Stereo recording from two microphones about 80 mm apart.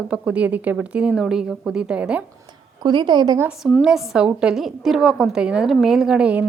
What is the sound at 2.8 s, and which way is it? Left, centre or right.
Speech, right.